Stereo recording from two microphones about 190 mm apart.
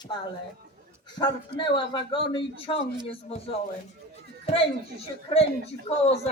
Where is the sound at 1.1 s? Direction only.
25° left (ahead or behind).